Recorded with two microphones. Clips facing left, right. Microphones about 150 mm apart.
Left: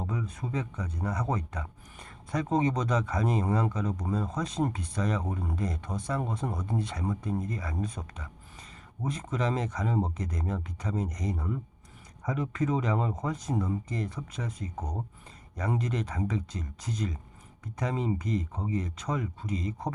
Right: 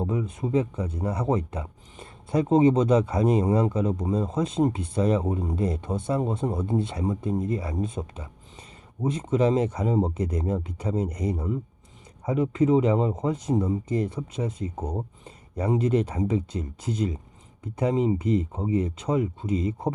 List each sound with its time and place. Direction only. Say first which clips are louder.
0.0 s speech: right 7 dB; 25° right (ahead or behind)